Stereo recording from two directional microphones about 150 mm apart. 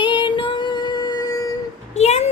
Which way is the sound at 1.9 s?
45° left (ahead or behind).